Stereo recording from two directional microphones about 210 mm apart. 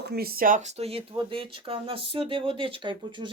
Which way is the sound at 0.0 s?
50° right (ahead or behind).